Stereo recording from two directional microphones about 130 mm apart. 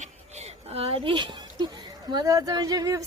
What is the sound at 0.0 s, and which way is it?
A woman's voice, 55° right (ahead or behind).